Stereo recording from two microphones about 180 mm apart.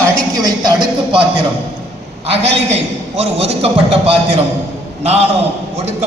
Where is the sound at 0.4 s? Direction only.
25° right (ahead or behind).